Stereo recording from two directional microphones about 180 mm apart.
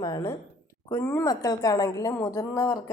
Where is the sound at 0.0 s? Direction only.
20° left (ahead or behind).